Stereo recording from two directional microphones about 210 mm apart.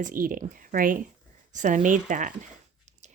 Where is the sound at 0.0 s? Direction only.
40° right (ahead or behind).